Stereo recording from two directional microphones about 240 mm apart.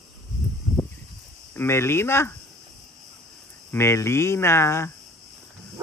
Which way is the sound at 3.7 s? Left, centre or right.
Centre.